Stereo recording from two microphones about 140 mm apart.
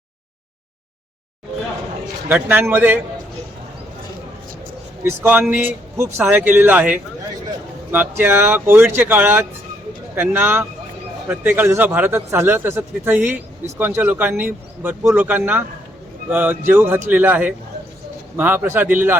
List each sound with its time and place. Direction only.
2.3 s speech: 10° right (ahead or behind)
5.0 s speech: 15° right (ahead or behind)